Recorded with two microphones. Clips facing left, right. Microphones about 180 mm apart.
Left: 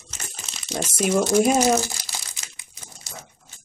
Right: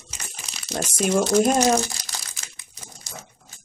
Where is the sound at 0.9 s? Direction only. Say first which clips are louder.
Even; 5° left (ahead or behind).